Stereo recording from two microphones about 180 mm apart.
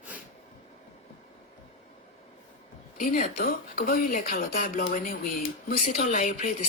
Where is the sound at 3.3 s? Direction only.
55° left (ahead or behind).